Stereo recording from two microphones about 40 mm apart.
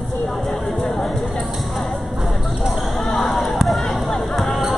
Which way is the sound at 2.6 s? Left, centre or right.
Centre.